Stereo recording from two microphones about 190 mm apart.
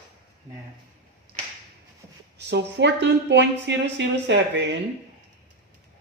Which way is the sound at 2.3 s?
65° right (ahead or behind).